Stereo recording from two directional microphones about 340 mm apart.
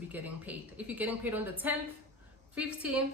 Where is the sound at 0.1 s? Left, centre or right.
Centre.